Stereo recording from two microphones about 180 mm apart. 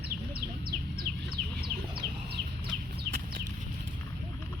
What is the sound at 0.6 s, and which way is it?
Bird, 55° right (ahead or behind).